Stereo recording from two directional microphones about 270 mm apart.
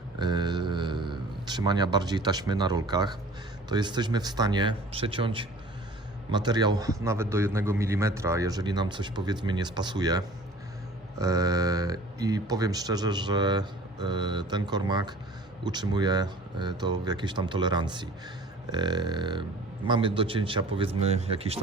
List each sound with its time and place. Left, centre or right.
0.2 s a man's voice: centre